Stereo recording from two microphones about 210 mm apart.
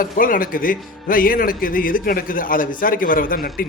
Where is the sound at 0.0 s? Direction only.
40° left (ahead or behind).